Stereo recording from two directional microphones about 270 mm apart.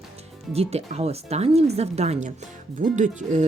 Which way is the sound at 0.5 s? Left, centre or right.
Right.